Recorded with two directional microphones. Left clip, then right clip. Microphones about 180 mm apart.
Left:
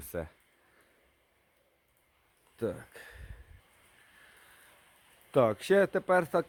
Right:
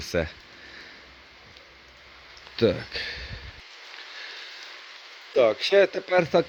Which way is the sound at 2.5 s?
5° right (ahead or behind).